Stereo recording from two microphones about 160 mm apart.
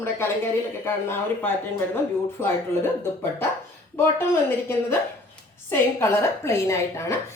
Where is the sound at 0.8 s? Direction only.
15° left (ahead or behind).